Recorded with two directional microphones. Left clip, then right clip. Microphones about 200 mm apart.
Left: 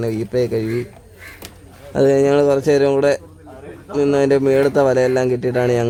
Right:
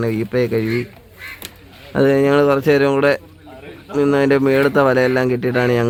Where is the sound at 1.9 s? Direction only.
15° right (ahead or behind).